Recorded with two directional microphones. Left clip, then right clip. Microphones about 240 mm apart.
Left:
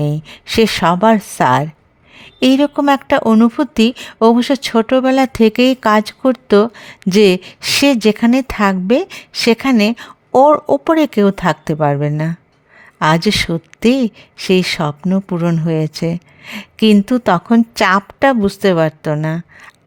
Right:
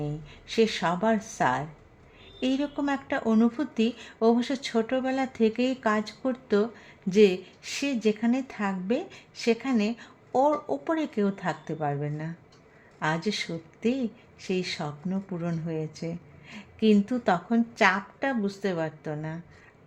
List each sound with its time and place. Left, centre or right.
0.0 s speech: left